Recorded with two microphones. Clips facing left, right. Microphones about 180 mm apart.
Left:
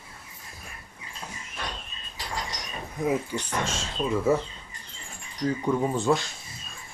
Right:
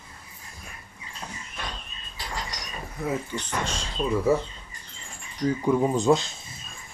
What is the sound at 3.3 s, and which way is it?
Speech, 15° left (ahead or behind).